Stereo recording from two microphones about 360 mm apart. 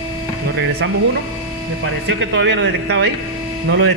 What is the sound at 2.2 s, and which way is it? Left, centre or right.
Speech, right.